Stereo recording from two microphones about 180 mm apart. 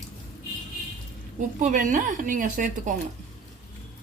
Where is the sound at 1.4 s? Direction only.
45° right (ahead or behind).